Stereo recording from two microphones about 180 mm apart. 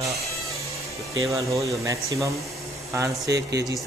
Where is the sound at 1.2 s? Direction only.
15° right (ahead or behind).